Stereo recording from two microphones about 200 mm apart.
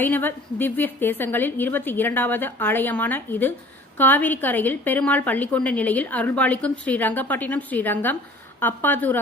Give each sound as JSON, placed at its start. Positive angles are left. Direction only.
{"t": 0.0, "sound": "a woman's voice", "side_deg": 10}